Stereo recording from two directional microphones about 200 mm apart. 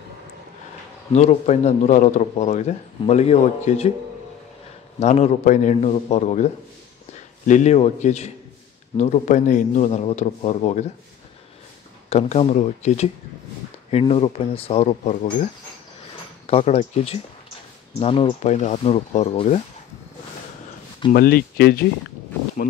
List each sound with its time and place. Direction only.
1.1 s speech: 35° left (ahead or behind)
5.0 s speech: 35° left (ahead or behind)
12.1 s speech: 30° left (ahead or behind)
21.1 s speech: 50° left (ahead or behind)